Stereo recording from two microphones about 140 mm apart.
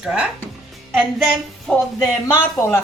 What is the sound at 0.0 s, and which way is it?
Music, 5° right (ahead or behind).